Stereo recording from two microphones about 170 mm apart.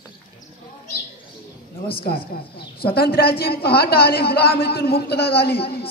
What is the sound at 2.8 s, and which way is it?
A woman's voice, 65° left (ahead or behind).